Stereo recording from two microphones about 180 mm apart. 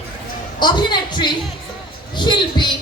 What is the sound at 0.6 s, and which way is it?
A woman's voice, 25° left (ahead or behind).